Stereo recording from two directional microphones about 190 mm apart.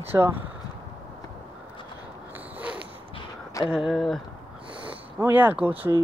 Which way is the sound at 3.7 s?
Centre (ahead or behind).